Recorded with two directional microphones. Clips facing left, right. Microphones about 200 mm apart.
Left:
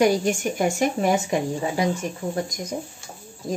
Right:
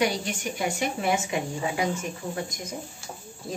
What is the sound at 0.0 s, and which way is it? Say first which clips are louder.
A woman's voice: left 7 dB; 45° left (ahead or behind).